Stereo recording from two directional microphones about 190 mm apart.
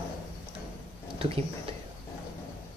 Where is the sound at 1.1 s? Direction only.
30° right (ahead or behind).